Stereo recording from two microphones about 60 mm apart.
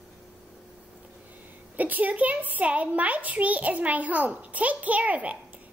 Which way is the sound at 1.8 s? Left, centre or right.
Right.